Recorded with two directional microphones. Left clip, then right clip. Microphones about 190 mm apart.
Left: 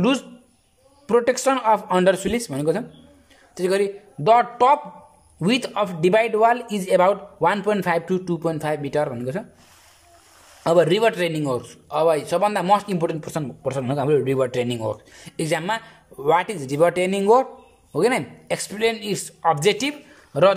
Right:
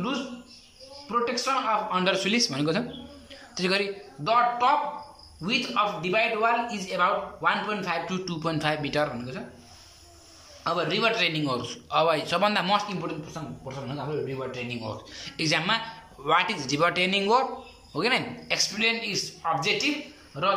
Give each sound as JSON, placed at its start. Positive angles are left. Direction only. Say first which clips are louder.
{"t": 1.0, "sound": "speech", "louder": "left 8 dB", "side_deg": 50}
{"t": 4.2, "sound": "speech", "louder": "left 6 dB", "side_deg": 50}
{"t": 10.6, "sound": "speech", "louder": "left 9 dB", "side_deg": 45}
{"t": 13.3, "sound": "speech", "louder": "left 11 dB", "side_deg": 65}